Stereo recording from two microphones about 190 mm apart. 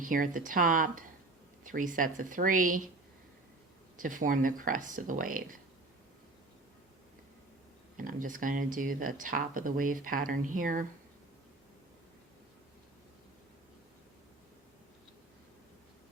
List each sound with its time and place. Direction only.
0.0 s speech: 45° right (ahead or behind)
3.9 s speech: 45° right (ahead or behind)
7.9 s speech: 45° right (ahead or behind)